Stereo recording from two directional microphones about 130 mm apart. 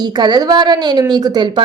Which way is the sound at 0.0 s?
35° right (ahead or behind).